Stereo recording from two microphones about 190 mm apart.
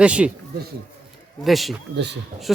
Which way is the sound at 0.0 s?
5° right (ahead or behind).